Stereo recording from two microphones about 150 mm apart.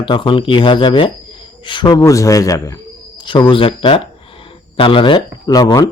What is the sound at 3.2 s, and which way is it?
Speech, 35° left (ahead or behind).